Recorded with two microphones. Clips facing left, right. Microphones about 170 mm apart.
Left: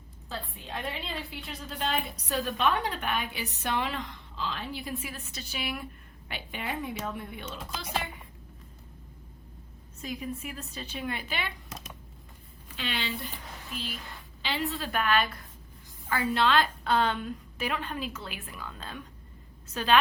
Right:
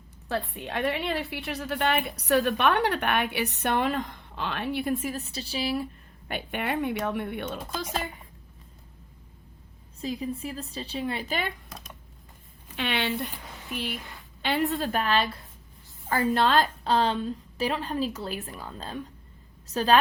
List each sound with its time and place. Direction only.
0.3 s a woman's voice: 70° right (ahead or behind); by 5.9 s 35° right (ahead or behind)
6.2 s a woman's voice: 55° right (ahead or behind)
10.0 s a woman's voice: 30° right (ahead or behind)
12.7 s a woman's voice: 60° right (ahead or behind)
14.9 s a woman's voice: 30° right (ahead or behind)
16.3 s a woman's voice: 45° right (ahead or behind)